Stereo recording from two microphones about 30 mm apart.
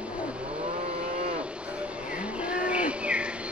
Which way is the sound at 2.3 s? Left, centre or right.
Right.